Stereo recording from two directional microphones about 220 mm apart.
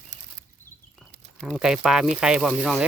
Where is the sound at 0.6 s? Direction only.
35° right (ahead or behind).